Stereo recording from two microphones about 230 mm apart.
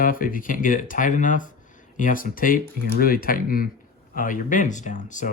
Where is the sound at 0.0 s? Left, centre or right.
Left.